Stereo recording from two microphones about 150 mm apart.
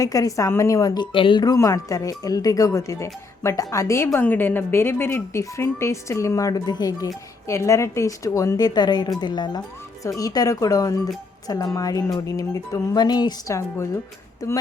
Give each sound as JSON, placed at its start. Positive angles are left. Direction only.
{"t": 0.0, "sound": "a woman's voice", "side_deg": 25}